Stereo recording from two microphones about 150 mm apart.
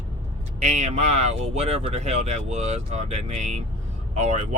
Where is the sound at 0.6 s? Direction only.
50° right (ahead or behind).